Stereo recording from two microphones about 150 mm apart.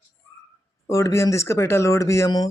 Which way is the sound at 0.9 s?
20° left (ahead or behind).